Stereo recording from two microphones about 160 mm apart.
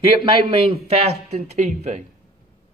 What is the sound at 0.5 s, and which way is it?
Speech, 40° right (ahead or behind).